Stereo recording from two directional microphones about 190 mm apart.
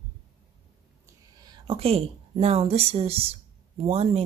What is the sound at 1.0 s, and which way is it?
A woman's voice, 20° right (ahead or behind).